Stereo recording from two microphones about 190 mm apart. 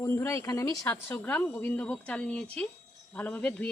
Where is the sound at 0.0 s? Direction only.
15° left (ahead or behind).